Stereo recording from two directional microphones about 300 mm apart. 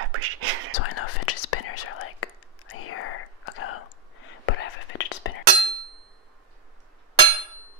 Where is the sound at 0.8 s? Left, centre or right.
Left.